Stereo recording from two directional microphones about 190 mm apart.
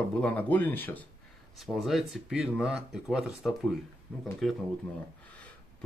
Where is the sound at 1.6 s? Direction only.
Centre (ahead or behind).